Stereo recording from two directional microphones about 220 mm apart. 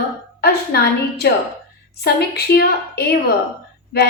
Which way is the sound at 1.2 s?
45° left (ahead or behind).